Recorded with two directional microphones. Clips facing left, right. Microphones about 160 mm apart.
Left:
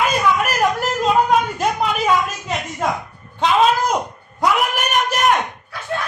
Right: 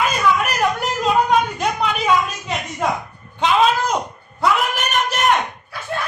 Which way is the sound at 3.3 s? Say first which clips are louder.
Left 1 dB; centre (ahead or behind).